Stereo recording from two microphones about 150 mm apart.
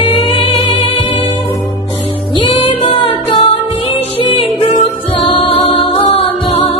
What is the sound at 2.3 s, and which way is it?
Music, 30° left (ahead or behind).